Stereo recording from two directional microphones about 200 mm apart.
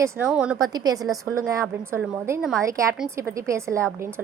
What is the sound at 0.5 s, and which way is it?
A woman's voice, 20° right (ahead or behind).